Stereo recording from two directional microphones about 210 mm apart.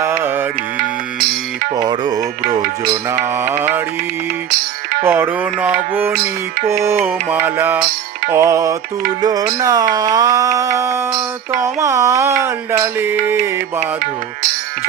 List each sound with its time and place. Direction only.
0.0 s music: 10° right (ahead or behind)
1.7 s music: 20° right (ahead or behind)
2.9 s mantra: 10° right (ahead or behind)
5.0 s mantra: 10° right (ahead or behind)